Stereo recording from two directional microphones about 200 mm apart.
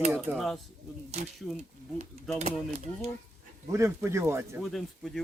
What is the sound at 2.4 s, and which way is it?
Speech, 30° right (ahead or behind).